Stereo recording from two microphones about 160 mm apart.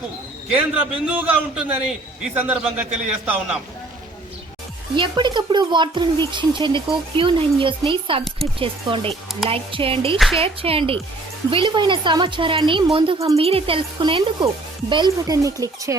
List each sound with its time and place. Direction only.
0.5 s a man's voice: 10° right (ahead or behind)
4.9 s a woman's voice: 30° right (ahead or behind)
10.2 s speech: centre (ahead or behind)
10.4 s a woman's voice: 35° right (ahead or behind); by 16.0 s 20° right (ahead or behind)